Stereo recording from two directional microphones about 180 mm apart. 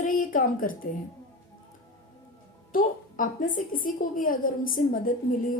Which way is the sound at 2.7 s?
50° left (ahead or behind).